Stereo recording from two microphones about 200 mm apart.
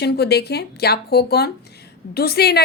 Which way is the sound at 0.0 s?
55° left (ahead or behind).